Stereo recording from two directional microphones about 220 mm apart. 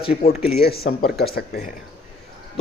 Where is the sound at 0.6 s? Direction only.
45° left (ahead or behind).